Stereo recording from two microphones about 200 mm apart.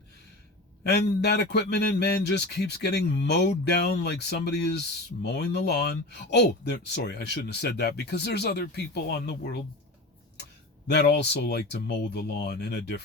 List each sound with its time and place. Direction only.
0.9 s speech: 55° left (ahead or behind)
10.8 s speech: 55° left (ahead or behind)